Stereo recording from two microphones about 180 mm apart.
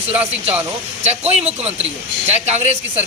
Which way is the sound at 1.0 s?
35° right (ahead or behind).